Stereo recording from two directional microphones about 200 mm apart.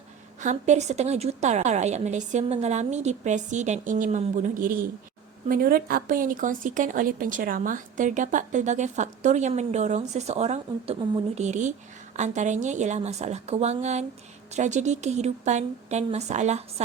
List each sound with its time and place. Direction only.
0.4 s speech: 35° right (ahead or behind)